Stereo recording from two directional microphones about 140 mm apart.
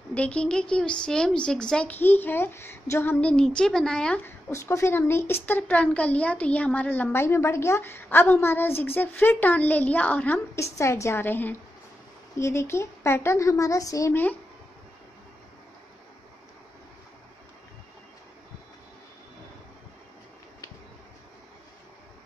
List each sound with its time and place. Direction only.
0.1 s a woman's voice: 10° left (ahead or behind)
4.5 s a woman's voice: 20° left (ahead or behind)